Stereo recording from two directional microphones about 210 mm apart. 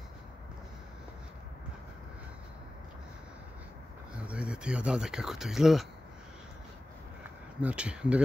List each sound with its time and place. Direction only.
4.3 s speech: 5° right (ahead or behind)
7.6 s speech: 5° right (ahead or behind)